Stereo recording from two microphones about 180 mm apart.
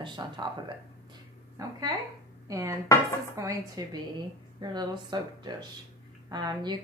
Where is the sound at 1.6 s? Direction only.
20° right (ahead or behind).